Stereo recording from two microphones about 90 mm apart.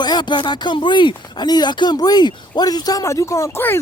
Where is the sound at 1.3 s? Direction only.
50° left (ahead or behind); by 3.6 s 35° left (ahead or behind).